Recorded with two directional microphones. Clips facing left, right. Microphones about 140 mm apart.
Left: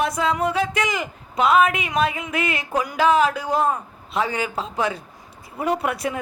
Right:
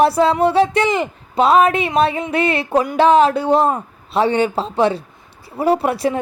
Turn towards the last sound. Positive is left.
turn(degrees=-30)  # may be behind; listen again after turning